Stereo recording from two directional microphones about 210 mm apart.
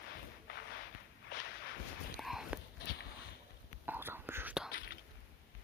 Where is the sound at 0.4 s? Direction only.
55° left (ahead or behind).